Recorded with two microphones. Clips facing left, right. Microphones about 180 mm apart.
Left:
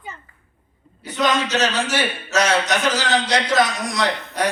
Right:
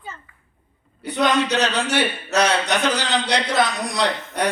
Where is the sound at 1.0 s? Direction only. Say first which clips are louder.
Right 2 dB; 60° right (ahead or behind).